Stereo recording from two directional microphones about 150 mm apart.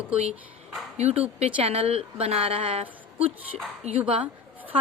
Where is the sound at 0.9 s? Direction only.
45° right (ahead or behind).